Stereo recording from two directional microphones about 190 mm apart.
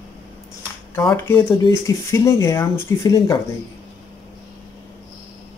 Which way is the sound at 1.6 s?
15° left (ahead or behind).